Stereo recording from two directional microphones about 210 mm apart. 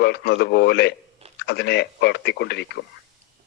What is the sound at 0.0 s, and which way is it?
Speech, 50° left (ahead or behind).